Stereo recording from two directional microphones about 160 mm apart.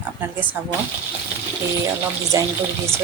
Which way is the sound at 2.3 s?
20° right (ahead or behind).